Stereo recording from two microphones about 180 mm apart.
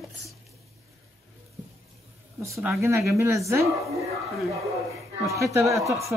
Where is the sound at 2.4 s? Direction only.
15° right (ahead or behind).